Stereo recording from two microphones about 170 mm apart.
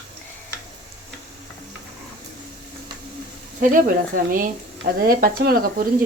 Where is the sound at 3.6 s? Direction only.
55° right (ahead or behind).